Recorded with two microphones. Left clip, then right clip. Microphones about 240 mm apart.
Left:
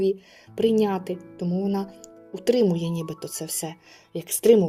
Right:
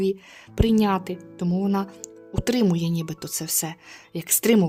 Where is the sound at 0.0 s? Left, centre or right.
Right.